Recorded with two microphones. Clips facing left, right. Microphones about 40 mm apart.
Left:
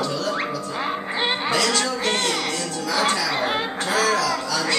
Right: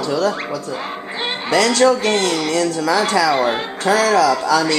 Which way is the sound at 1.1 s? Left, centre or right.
Centre.